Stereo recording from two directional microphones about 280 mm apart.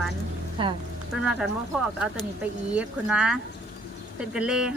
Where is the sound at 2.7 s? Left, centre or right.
Centre.